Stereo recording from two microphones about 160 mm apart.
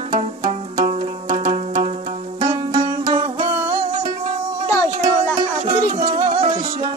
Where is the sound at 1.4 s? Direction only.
45° right (ahead or behind).